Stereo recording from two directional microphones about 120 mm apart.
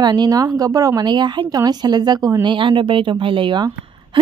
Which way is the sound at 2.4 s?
45° right (ahead or behind).